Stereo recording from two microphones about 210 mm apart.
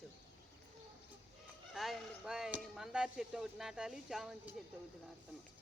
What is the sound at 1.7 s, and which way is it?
Chop, centre (ahead or behind).